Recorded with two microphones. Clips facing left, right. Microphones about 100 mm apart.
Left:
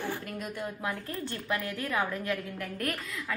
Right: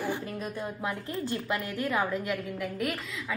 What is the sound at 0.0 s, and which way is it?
A woman's voice, 20° right (ahead or behind).